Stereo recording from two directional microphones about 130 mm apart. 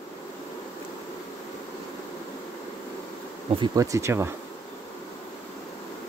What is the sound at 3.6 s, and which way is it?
Speech, 30° right (ahead or behind).